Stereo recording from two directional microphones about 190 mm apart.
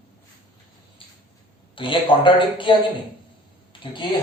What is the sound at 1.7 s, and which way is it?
A man's voice, 25° left (ahead or behind).